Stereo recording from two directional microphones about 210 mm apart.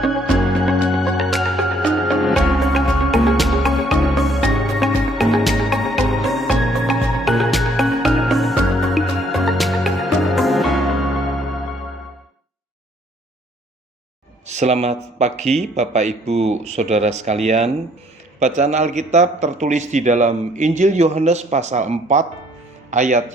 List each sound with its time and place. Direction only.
0.0 s music: centre (ahead or behind)
14.4 s a man's voice: 35° right (ahead or behind)